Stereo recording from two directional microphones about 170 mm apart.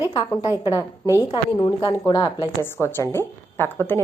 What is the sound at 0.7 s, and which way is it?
A woman's voice, 20° left (ahead or behind).